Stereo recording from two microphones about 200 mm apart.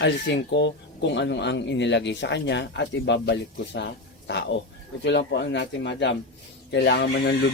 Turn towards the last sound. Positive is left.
turn(degrees=55)  # may be behind; listen again after turning